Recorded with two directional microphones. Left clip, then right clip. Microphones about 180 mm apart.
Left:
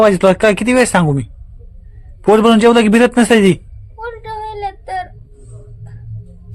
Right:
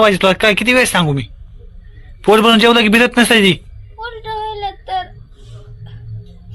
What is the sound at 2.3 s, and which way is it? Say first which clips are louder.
Speech: even; 20° left (ahead or behind).